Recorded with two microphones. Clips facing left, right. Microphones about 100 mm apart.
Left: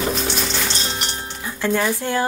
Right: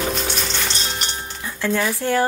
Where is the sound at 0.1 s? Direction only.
Centre (ahead or behind).